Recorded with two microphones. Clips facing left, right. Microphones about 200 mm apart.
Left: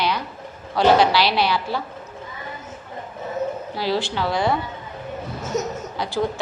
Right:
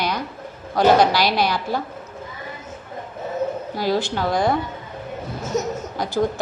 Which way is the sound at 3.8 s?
45° right (ahead or behind).